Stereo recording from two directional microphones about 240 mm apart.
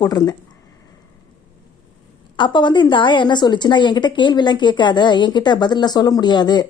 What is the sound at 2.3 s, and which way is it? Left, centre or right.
A woman's voice, centre.